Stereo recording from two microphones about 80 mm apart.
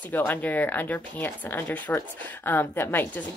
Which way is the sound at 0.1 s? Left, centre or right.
Left.